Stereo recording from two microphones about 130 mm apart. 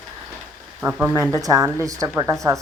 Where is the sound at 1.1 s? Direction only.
25° right (ahead or behind).